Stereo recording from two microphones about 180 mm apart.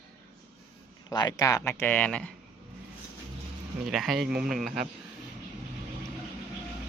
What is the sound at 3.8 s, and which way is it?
Speech, centre (ahead or behind).